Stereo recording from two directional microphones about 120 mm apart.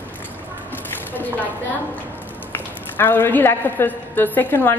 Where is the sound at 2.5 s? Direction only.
15° left (ahead or behind).